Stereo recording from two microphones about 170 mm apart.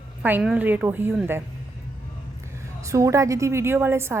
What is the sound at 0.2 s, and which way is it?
A woman's voice, 10° right (ahead or behind).